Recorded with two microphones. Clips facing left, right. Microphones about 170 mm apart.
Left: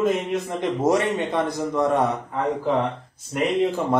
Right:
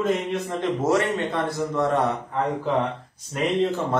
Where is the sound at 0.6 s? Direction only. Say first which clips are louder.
Left 1 dB; 15° left (ahead or behind).